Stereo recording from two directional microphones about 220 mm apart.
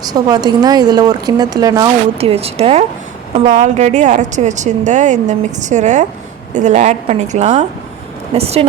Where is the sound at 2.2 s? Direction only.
25° right (ahead or behind).